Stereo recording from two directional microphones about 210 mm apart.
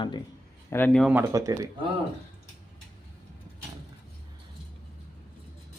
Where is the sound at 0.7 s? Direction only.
10° left (ahead or behind).